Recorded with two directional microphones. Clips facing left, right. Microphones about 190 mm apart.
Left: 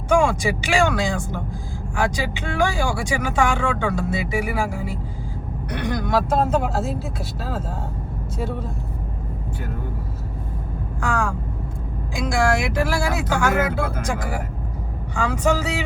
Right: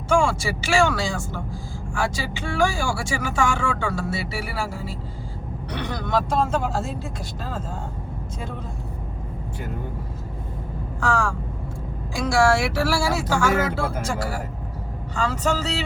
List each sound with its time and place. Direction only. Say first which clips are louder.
0.1 s speech: left 2 dB; 15° left (ahead or behind)
11.0 s speech: right 1 dB; 15° left (ahead or behind)